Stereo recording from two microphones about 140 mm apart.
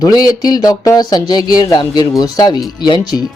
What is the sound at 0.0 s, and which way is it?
Speech, 30° left (ahead or behind).